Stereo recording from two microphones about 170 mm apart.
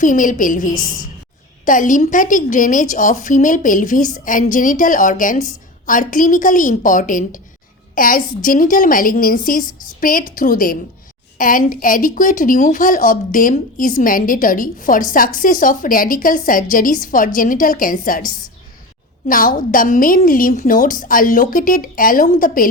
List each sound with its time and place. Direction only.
0.0 s a woman's voice: 50° left (ahead or behind)
19.3 s a woman's voice: 55° left (ahead or behind)